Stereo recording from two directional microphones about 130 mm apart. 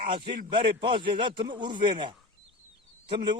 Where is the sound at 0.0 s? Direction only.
45° right (ahead or behind).